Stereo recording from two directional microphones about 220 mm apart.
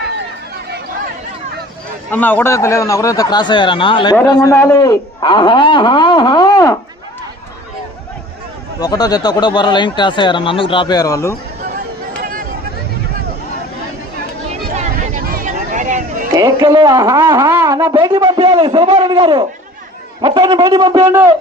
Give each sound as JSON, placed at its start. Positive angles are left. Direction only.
{"t": 2.0, "sound": "a man's voice", "side_deg": 10}
{"t": 8.8, "sound": "a man's voice", "side_deg": 15}
{"t": 12.1, "sound": "a sound", "side_deg": -40}
{"t": 14.8, "sound": "hubbub", "side_deg": -35}
{"t": 16.3, "sound": "a man's voice", "side_deg": -15}